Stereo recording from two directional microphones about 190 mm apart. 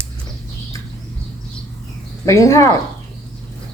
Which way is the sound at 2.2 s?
15° left (ahead or behind).